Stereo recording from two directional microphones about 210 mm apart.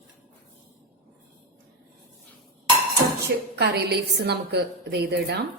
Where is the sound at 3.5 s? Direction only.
50° right (ahead or behind).